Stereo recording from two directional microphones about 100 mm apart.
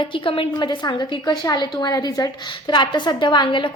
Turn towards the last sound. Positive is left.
turn(degrees=55)  # may be behind; listen again after turning